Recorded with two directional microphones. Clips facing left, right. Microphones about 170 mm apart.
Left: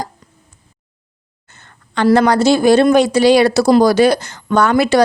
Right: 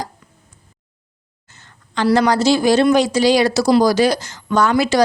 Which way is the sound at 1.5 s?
60° left (ahead or behind).